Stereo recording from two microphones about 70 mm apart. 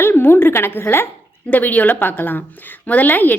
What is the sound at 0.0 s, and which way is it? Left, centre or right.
A woman's voice, left.